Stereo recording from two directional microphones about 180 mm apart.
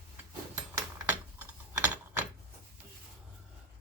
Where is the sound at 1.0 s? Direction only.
10° right (ahead or behind).